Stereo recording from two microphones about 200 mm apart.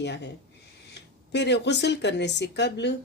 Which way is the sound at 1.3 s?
60° left (ahead or behind).